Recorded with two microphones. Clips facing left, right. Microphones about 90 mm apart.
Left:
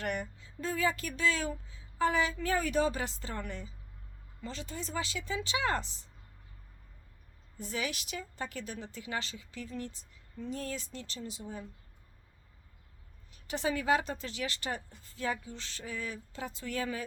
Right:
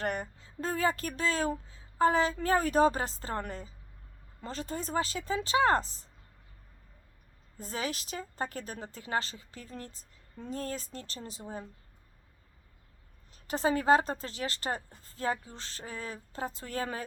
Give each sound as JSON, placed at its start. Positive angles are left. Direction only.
{"t": 0.0, "sound": "a woman's voice", "side_deg": -35}
{"t": 7.6, "sound": "a woman's voice", "side_deg": -35}
{"t": 13.3, "sound": "a woman's voice", "side_deg": -35}